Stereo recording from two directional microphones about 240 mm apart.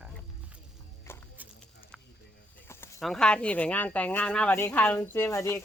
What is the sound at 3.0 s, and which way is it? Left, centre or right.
A woman's voice, centre.